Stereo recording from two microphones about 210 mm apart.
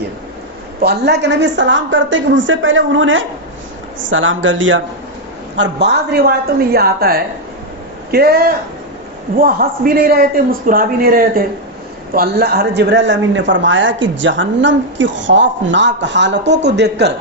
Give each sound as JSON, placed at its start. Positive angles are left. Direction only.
{"t": 0.8, "sound": "speech", "side_deg": -50}
{"t": 5.5, "sound": "a man's voice", "side_deg": -55}